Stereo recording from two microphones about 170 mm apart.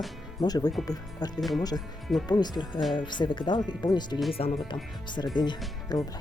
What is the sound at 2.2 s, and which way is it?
Speech, 25° left (ahead or behind).